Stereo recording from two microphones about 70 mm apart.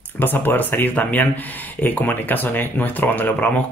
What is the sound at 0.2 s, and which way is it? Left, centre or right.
Speech, left.